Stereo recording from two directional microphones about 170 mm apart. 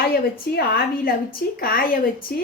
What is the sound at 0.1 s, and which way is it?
A woman's voice, 65° left (ahead or behind).